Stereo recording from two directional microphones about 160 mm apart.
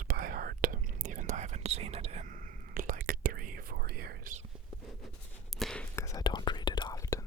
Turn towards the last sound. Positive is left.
turn(degrees=20)  # may be behind; listen again after turning